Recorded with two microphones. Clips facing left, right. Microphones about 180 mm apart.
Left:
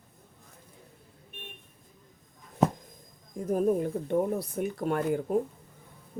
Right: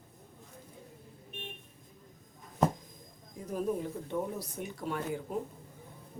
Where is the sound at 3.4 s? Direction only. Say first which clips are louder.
Left 8 dB; 50° left (ahead or behind).